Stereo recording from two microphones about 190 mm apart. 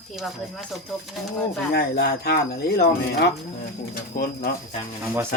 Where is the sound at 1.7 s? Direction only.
55° left (ahead or behind).